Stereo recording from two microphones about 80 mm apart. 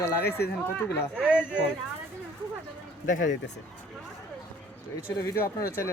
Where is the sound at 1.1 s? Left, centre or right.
Centre.